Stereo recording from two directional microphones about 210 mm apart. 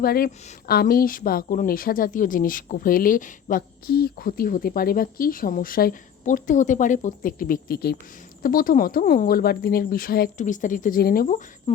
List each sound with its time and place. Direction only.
0.0 s a woman's voice: 45° left (ahead or behind)